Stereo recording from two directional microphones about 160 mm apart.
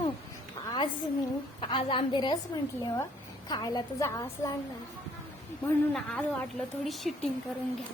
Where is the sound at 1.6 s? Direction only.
30° left (ahead or behind).